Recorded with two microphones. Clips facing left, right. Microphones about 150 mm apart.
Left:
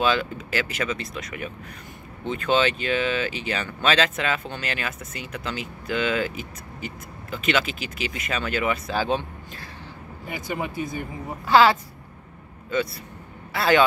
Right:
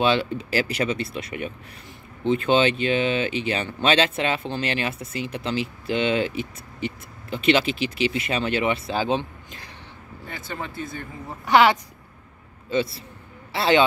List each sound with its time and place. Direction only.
0.0 s speech: 30° right (ahead or behind)
10.2 s speech: 15° left (ahead or behind)
11.4 s a man's voice: 20° right (ahead or behind)